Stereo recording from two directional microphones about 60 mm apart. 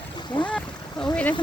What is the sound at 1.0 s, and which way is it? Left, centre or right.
Speech, centre.